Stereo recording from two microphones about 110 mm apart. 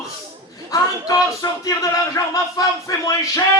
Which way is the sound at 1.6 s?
30° left (ahead or behind).